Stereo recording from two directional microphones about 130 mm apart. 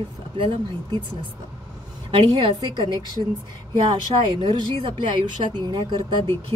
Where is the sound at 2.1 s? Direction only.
40° right (ahead or behind).